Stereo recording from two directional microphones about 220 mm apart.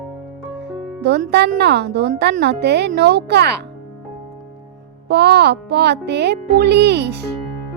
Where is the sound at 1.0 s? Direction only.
50° right (ahead or behind).